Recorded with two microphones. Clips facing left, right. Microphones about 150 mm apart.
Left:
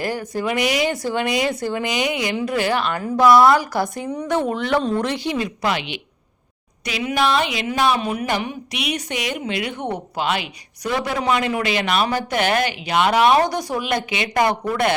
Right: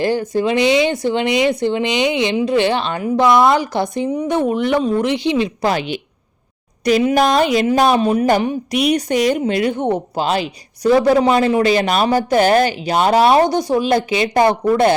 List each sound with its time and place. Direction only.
0.0 s speech: 25° right (ahead or behind)
4.1 s speech: 10° right (ahead or behind)
4.8 s speech: 5° right (ahead or behind)
5.0 s speech: 20° right (ahead or behind)
5.6 s a woman's voice: 40° right (ahead or behind)
7.0 s a woman's voice: 40° right (ahead or behind)